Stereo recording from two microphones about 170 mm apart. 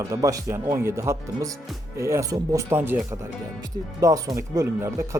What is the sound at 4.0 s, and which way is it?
Speech, 20° right (ahead or behind).